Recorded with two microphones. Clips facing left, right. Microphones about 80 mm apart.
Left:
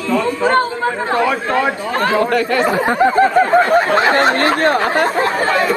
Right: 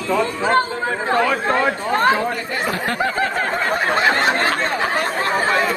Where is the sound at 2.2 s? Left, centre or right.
Left.